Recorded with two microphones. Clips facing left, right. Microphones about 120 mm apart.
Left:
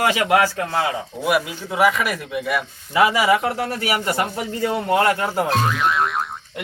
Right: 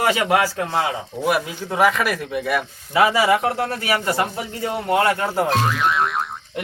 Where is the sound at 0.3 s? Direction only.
10° right (ahead or behind).